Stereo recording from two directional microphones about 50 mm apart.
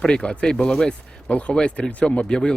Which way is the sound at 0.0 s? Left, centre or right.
Centre.